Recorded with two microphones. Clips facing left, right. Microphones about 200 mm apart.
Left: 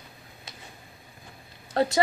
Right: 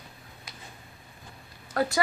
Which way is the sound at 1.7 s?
25° left (ahead or behind).